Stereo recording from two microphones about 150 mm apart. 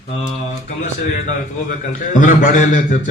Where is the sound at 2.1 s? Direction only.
60° left (ahead or behind).